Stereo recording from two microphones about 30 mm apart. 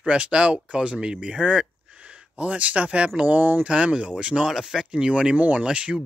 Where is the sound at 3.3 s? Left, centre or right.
Right.